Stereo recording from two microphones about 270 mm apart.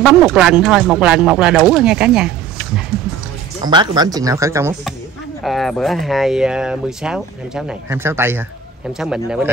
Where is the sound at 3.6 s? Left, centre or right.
Centre.